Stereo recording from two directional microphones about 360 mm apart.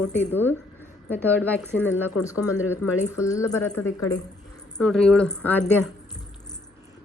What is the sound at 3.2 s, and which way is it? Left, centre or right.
A woman's voice, centre.